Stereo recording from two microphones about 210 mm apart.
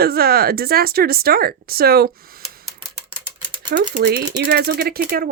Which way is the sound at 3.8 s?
50° right (ahead or behind).